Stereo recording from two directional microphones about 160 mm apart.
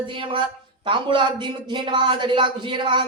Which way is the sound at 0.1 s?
30° right (ahead or behind).